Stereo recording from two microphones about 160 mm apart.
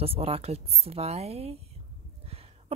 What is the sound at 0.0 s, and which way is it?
A woman's voice, 35° right (ahead or behind).